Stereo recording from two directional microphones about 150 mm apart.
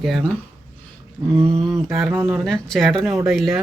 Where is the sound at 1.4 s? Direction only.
40° right (ahead or behind).